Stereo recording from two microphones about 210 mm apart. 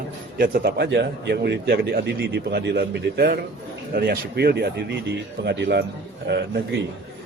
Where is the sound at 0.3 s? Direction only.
45° right (ahead or behind).